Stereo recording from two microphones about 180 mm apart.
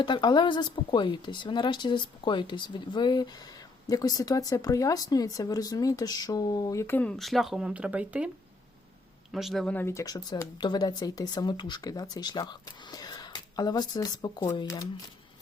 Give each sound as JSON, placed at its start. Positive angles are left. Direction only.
{"t": 0.0, "sound": "speech", "side_deg": 25}
{"t": 9.3, "sound": "speech", "side_deg": 0}